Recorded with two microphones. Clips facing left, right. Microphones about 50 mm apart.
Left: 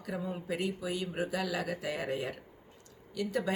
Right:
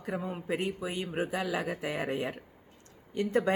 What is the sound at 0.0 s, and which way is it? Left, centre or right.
Speech, right.